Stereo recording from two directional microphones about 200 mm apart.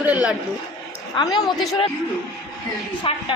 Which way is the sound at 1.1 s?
20° left (ahead or behind).